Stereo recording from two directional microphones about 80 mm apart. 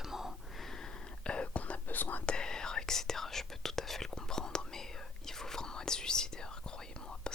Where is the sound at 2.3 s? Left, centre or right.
Centre.